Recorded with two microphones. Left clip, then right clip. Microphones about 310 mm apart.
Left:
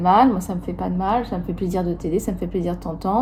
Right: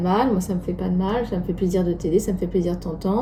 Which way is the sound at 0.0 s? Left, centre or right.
Centre.